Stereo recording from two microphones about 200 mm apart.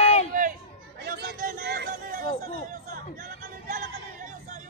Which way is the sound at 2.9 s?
40° right (ahead or behind).